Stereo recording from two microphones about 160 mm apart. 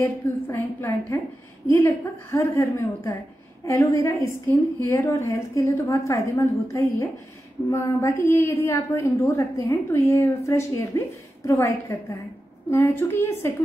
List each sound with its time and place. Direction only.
0.0 s a woman's voice: 15° left (ahead or behind)